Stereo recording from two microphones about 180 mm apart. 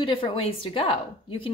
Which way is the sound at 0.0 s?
30° left (ahead or behind).